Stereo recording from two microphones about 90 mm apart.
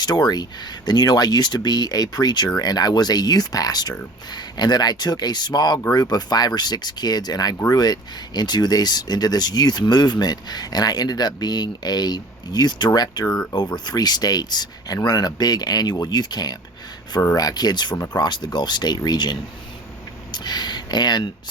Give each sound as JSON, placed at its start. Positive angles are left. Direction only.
{"t": 0.0, "sound": "speech", "side_deg": 50}